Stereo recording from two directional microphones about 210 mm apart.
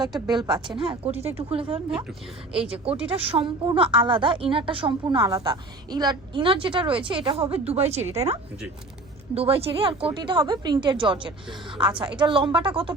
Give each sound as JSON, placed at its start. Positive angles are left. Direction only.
{"t": 0.5, "sound": "a woman's voice", "side_deg": 0}
{"t": 0.9, "sound": "a woman's voice", "side_deg": -30}
{"t": 2.5, "sound": "a woman's voice", "side_deg": -5}
{"t": 3.3, "sound": "a woman's voice", "side_deg": -25}